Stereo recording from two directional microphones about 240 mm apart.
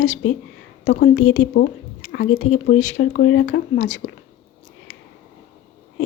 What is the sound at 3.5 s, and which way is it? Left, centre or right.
Speech, left.